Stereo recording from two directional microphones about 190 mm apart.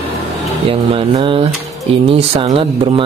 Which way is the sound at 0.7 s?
30° right (ahead or behind).